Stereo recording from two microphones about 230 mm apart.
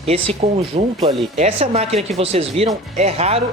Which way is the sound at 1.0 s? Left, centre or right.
Right.